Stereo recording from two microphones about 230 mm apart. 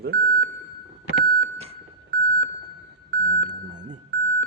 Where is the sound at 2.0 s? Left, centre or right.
Right.